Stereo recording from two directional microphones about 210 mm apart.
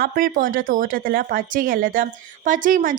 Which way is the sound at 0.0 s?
40° right (ahead or behind).